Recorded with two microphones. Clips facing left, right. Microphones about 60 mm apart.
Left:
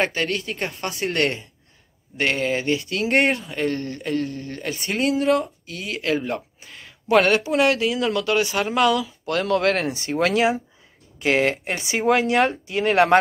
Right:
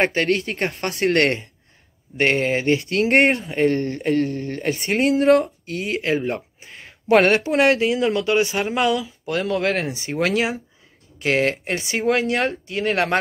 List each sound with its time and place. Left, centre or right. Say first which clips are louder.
0.1 s speech: right 4 dB; right
3.4 s speech: right 5 dB; right
6.0 s speech: left 2 dB; right
6.9 s speech: right 2 dB; right
7.9 s speech: right 2 dB; right
8.9 s speech: even; centre